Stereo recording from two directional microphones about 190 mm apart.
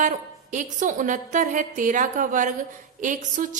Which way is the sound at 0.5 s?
40° right (ahead or behind).